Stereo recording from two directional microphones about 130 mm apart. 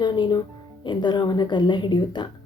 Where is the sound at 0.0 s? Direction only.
35° left (ahead or behind).